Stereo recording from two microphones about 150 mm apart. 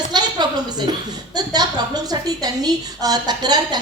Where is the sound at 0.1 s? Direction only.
30° right (ahead or behind).